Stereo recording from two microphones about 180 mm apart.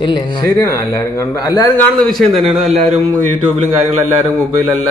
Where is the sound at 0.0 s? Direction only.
20° left (ahead or behind).